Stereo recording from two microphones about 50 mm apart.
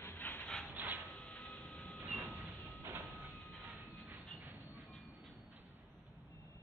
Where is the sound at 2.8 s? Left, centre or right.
Right.